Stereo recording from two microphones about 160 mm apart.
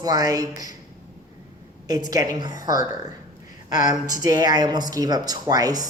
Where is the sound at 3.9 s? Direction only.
25° right (ahead or behind).